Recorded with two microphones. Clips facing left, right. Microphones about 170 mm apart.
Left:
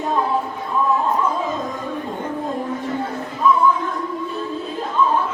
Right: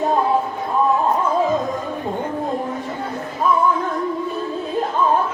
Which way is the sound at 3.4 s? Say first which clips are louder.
Left 2 dB; 45° right (ahead or behind).